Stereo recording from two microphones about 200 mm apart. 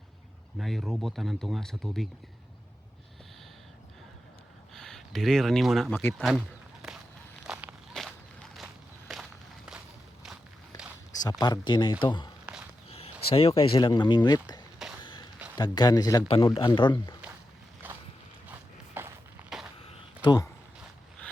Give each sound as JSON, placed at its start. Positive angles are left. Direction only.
{"t": 0.6, "sound": "speech", "side_deg": 0}
{"t": 4.7, "sound": "speech", "side_deg": 0}
{"t": 7.4, "sound": "walk", "side_deg": -5}
{"t": 11.1, "sound": "speech", "side_deg": 20}
{"t": 14.8, "sound": "a sound", "side_deg": 0}
{"t": 15.5, "sound": "speech", "side_deg": 20}
{"t": 17.8, "sound": "boat", "side_deg": -10}
{"t": 19.0, "sound": "walk", "side_deg": -10}
{"t": 19.4, "sound": "skateboard", "side_deg": -10}
{"t": 19.8, "sound": "a sound", "side_deg": 30}